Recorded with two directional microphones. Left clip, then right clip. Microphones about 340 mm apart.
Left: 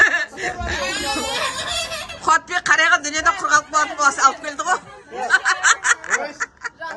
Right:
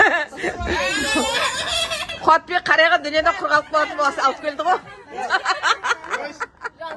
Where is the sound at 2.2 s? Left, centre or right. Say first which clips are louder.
Right 1 dB; centre.